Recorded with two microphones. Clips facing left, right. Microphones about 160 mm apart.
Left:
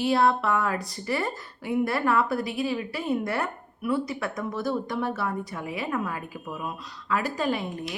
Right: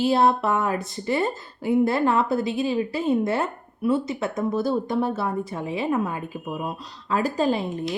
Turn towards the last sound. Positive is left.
turn(degrees=-25)  # may be behind; listen again after turning